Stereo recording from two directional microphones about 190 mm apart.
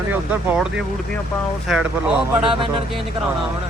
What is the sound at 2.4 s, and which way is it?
Speech, 25° right (ahead or behind).